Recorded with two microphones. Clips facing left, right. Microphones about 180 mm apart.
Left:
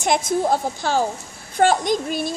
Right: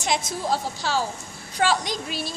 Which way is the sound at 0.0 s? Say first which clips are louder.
Left 7 dB; 55° left (ahead or behind).